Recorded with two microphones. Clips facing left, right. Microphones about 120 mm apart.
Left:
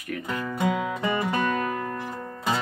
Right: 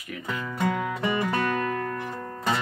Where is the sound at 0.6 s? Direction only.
10° left (ahead or behind).